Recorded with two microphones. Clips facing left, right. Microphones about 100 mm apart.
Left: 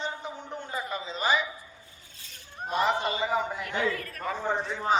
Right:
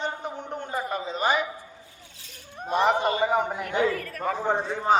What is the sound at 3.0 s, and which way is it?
A man's voice, 55° right (ahead or behind).